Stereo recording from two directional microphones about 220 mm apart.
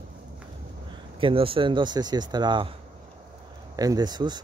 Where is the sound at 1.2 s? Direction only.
25° right (ahead or behind).